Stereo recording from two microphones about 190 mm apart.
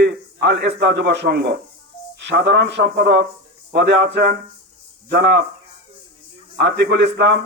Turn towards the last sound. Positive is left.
turn(degrees=-60)  # may be behind; listen again after turning